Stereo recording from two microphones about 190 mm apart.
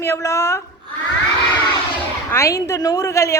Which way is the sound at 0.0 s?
15° left (ahead or behind).